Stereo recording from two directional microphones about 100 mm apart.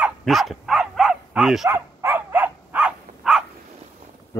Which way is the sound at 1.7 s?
20° right (ahead or behind).